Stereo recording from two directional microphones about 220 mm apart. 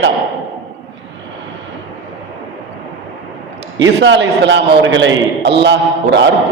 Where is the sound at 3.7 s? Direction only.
55° right (ahead or behind).